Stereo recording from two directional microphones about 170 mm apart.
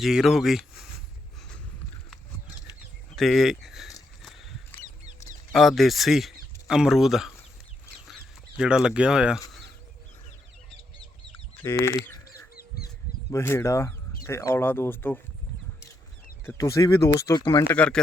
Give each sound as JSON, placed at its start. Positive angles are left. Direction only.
{"t": 0.0, "sound": "speech", "side_deg": -5}
{"t": 3.2, "sound": "speech", "side_deg": 0}
{"t": 5.5, "sound": "speech", "side_deg": 0}
{"t": 8.0, "sound": "chicken", "side_deg": -5}
{"t": 11.6, "sound": "rodents", "side_deg": 15}
{"t": 13.3, "sound": "speech", "side_deg": 15}
{"t": 16.5, "sound": "speech", "side_deg": 15}